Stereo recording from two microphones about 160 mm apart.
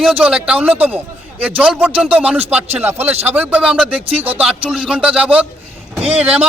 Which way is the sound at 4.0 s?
35° right (ahead or behind).